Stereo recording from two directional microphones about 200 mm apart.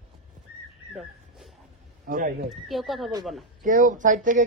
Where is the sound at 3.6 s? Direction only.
40° right (ahead or behind).